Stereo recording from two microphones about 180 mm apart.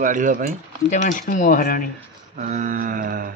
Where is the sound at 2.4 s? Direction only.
45° right (ahead or behind).